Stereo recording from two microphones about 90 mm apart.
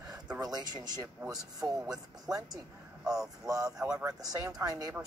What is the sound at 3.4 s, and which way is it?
Speech, 40° right (ahead or behind).